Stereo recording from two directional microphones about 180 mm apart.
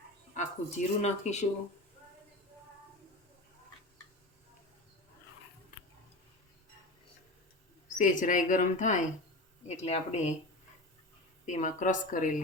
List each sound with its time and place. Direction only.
0.3 s speech: 40° left (ahead or behind)
7.9 s a woman's voice: 45° left (ahead or behind)
11.4 s a woman's voice: 45° left (ahead or behind)